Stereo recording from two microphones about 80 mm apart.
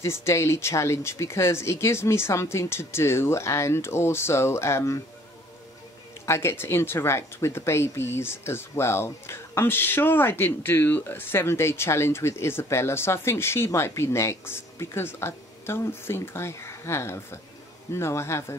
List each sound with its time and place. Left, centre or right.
0.0 s speech: left
6.2 s speech: left